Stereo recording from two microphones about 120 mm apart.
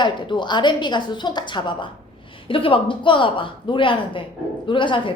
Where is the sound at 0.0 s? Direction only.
40° left (ahead or behind).